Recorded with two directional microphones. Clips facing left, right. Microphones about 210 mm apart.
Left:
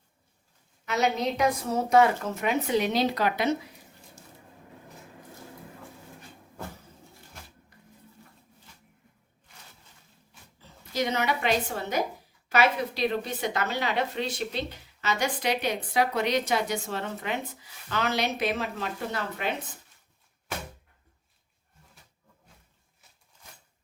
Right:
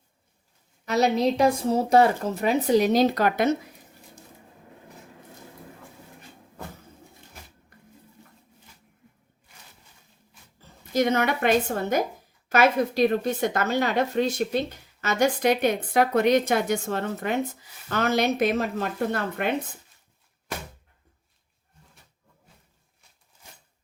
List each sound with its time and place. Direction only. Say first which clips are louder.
0.9 s speech: right 5 dB; 35° right (ahead or behind)
7.7 s a sound: right 3 dB; 55° right (ahead or behind)
10.6 s speech: right 6 dB; 50° right (ahead or behind)